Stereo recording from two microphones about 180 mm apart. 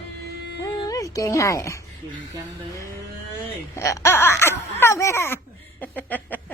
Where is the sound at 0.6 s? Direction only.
20° left (ahead or behind).